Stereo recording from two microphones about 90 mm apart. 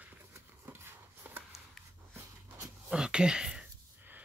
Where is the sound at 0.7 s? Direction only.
25° right (ahead or behind).